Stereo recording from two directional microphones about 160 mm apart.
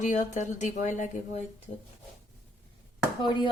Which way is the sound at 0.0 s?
50° left (ahead or behind).